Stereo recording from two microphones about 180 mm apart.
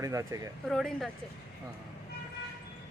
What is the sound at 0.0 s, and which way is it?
Speech, 15° right (ahead or behind).